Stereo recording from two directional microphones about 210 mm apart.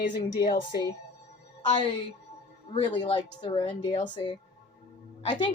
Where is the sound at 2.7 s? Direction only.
20° left (ahead or behind).